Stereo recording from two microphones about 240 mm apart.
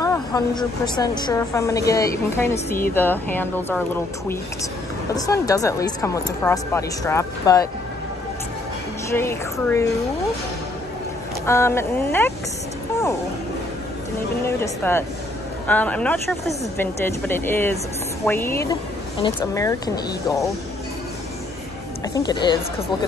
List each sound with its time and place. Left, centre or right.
0.0 s a woman's voice: centre
9.1 s a woman's voice: centre
11.4 s a woman's voice: centre
14.4 s a woman's voice: centre
22.1 s a woman's voice: centre